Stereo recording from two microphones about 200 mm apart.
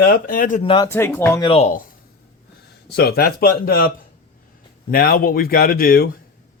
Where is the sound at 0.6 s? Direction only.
20° left (ahead or behind).